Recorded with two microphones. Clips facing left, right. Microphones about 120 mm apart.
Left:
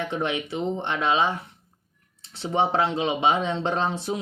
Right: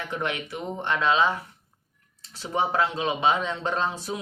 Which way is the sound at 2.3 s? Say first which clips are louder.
Left 3 dB; 25° left (ahead or behind).